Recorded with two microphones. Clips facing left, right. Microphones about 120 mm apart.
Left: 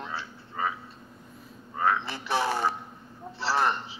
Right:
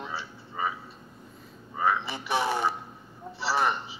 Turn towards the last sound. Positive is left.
turn(degrees=-5)  # may be behind; listen again after turning